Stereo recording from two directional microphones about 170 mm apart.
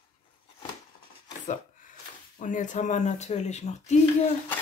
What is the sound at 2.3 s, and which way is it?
Speech, 50° left (ahead or behind).